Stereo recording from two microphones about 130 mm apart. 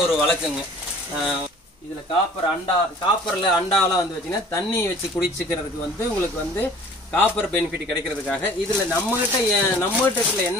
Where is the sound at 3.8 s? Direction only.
25° left (ahead or behind).